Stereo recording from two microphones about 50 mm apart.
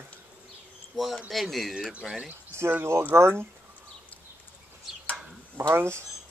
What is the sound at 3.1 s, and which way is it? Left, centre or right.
Speech, right.